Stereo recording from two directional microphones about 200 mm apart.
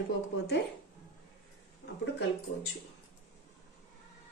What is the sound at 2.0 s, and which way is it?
Speech, 60° left (ahead or behind).